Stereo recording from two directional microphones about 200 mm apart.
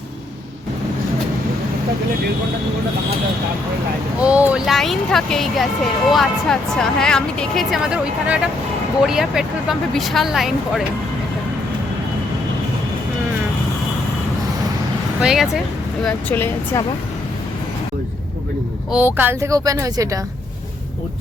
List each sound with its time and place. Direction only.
4.2 s speech: 5° right (ahead or behind)
15.2 s speech: centre (ahead or behind)
16.0 s speech: 10° left (ahead or behind)
18.9 s speech: 10° right (ahead or behind)